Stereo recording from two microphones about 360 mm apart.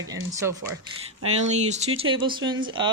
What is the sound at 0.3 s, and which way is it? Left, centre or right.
Speech, centre.